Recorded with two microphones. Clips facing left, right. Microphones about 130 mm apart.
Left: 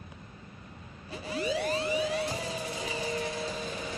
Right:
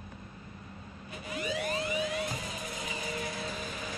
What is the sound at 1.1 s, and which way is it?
Music, 30° left (ahead or behind).